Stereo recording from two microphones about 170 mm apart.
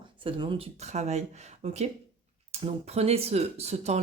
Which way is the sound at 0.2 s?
30° right (ahead or behind).